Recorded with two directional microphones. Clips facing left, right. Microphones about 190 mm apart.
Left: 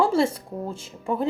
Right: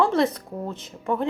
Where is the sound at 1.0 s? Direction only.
10° left (ahead or behind).